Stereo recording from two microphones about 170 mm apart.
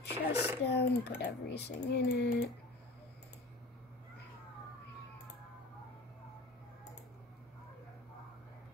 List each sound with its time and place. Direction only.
0.1 s speech: 10° right (ahead or behind)
0.7 s speech: 75° left (ahead or behind)